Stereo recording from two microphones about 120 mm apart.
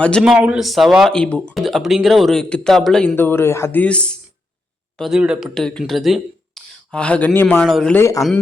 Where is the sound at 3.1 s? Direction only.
20° left (ahead or behind); by 5.5 s 10° right (ahead or behind).